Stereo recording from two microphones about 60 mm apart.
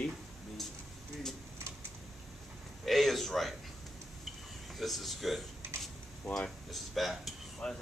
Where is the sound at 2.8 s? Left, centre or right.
Centre.